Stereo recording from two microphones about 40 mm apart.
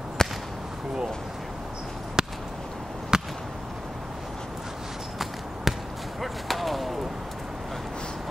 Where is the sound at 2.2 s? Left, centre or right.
Right.